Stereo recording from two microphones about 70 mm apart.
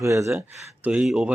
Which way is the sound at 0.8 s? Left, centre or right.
Centre.